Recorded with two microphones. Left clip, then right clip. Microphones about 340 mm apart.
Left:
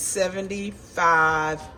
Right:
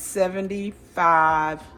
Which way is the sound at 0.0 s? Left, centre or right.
Centre.